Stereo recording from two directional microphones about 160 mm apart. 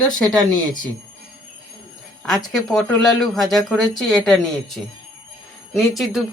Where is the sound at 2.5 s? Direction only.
5° left (ahead or behind).